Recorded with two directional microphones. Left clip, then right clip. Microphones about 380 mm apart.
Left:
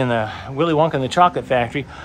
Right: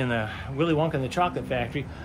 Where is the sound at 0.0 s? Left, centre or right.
Centre.